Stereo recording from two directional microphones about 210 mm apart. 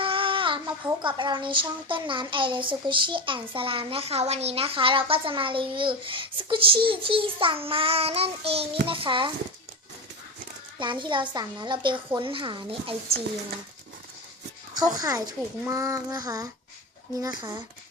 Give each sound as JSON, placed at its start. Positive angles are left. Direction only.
{"t": 0.0, "sound": "speech", "side_deg": -25}
{"t": 10.8, "sound": "speech", "side_deg": -20}
{"t": 14.8, "sound": "child singing", "side_deg": -15}